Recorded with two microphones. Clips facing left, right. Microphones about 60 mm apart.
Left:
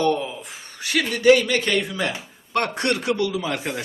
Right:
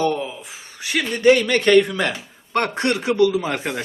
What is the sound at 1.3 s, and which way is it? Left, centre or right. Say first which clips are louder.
Speech: right 6 dB; right.